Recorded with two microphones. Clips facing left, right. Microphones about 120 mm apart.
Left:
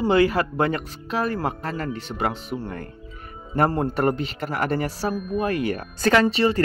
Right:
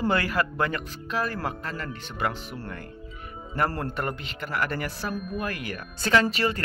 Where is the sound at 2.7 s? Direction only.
40° left (ahead or behind).